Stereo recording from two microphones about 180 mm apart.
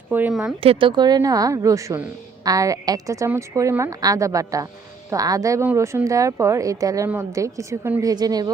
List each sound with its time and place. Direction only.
0.1 s speech: 5° right (ahead or behind)
0.6 s a woman's voice: 30° right (ahead or behind)